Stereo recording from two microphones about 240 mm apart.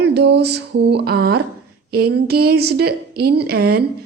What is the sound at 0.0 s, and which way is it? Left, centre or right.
A woman's voice, right.